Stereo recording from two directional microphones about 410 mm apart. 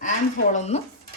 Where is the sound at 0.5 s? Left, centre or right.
Centre.